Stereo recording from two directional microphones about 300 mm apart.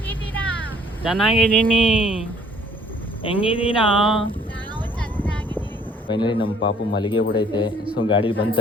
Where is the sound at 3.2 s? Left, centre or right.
Centre.